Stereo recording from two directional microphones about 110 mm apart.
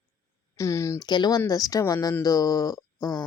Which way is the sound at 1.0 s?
40° left (ahead or behind).